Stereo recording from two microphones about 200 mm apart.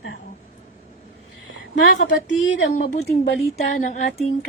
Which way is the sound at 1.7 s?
65° left (ahead or behind).